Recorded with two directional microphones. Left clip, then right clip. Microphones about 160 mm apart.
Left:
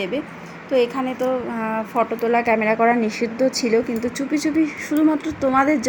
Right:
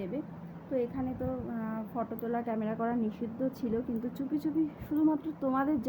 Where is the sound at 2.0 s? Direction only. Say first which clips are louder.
Left 16 dB; 15° left (ahead or behind).